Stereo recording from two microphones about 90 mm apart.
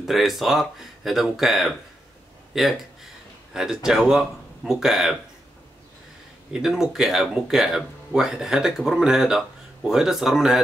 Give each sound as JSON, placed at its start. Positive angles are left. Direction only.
{"t": 0.0, "sound": "speech", "side_deg": 0}
{"t": 6.5, "sound": "speech", "side_deg": -5}